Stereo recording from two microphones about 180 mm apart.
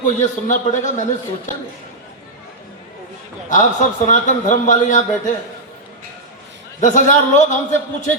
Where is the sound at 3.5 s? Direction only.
45° left (ahead or behind).